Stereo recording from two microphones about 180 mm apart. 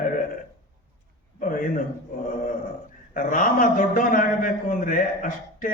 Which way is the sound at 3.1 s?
45° left (ahead or behind).